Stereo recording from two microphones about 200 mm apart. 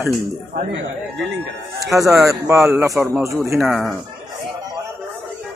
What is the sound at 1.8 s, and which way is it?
Speech, 15° right (ahead or behind).